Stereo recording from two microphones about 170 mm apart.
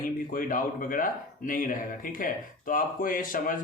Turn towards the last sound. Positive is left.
turn(degrees=50)  # may be behind; listen again after turning